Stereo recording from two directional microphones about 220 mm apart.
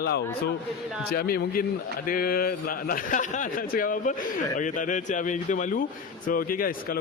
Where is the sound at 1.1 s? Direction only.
45° left (ahead or behind).